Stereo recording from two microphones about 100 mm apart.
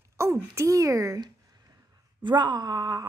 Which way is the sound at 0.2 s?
30° right (ahead or behind).